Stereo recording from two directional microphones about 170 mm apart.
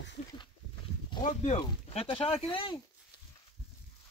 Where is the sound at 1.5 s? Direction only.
30° left (ahead or behind).